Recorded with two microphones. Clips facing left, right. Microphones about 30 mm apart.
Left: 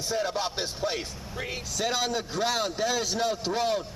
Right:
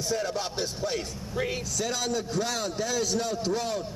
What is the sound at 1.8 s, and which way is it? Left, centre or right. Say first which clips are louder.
A man's voice: left 3 dB; left.